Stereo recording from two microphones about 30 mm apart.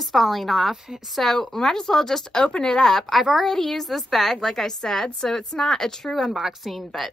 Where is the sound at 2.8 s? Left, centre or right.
Centre.